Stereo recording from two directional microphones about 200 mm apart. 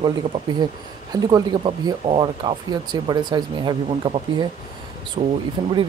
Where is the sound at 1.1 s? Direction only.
20° right (ahead or behind).